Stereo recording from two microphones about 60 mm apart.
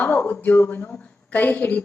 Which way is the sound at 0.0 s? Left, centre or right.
Left.